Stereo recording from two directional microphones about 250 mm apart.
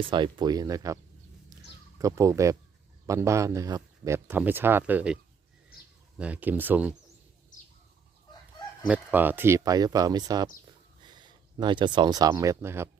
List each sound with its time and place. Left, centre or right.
0.0 s speech: centre
2.0 s speech: centre
8.9 s speech: centre
10.7 s a sound: centre